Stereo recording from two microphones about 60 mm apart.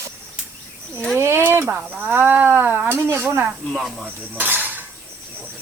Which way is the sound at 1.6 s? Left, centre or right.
Right.